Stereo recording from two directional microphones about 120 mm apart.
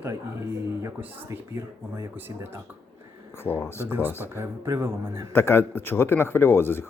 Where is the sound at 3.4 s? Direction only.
20° left (ahead or behind).